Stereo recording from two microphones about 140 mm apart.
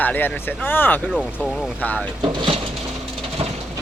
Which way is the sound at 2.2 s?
35° right (ahead or behind).